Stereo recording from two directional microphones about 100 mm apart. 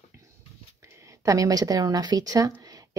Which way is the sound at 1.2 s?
35° right (ahead or behind).